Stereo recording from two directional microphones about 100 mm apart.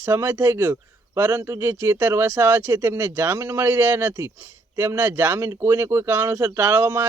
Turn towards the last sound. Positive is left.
turn(degrees=-20)  # may be behind; listen again after turning